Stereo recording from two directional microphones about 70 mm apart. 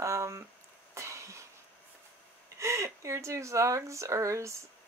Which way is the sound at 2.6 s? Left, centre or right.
Right.